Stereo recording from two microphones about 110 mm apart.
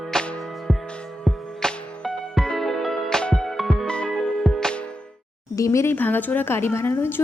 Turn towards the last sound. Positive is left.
turn(degrees=20)  # may be behind; listen again after turning